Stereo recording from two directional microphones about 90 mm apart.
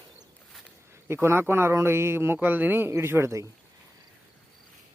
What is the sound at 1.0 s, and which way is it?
Speech, 30° right (ahead or behind).